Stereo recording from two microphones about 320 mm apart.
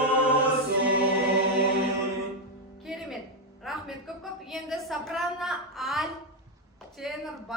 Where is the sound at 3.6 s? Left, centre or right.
Centre.